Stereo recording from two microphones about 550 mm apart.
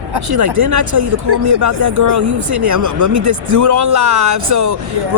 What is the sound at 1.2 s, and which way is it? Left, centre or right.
Vehicle, right.